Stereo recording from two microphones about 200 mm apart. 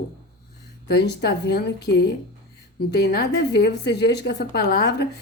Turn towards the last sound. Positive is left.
turn(degrees=55)  # may be behind; listen again after turning